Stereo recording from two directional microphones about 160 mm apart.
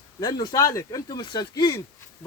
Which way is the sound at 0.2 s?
25° left (ahead or behind).